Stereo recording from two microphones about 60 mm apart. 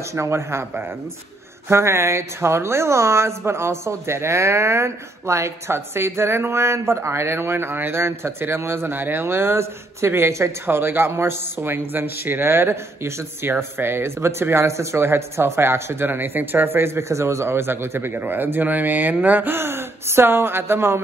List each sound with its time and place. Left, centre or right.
0.1 s a woman's voice: right
1.7 s a woman's voice: right